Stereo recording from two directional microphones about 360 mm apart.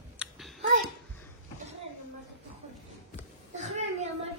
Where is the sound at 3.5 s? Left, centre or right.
Centre.